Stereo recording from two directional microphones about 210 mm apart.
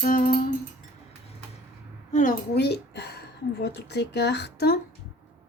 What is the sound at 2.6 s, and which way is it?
Speech, 55° left (ahead or behind).